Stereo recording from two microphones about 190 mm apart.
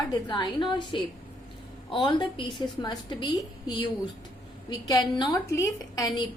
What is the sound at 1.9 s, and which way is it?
A woman's voice, 25° left (ahead or behind).